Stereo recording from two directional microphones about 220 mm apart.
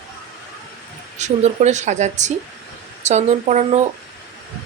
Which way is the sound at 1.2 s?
30° right (ahead or behind).